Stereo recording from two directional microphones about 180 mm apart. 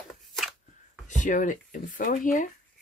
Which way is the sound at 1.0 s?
45° left (ahead or behind).